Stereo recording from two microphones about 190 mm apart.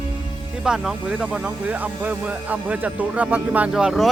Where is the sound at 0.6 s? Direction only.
5° right (ahead or behind).